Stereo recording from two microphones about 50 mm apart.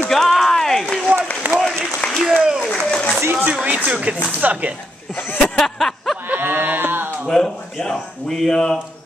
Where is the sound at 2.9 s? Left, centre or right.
Centre.